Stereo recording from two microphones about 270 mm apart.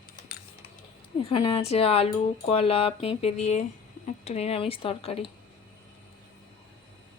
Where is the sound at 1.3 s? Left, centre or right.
Centre.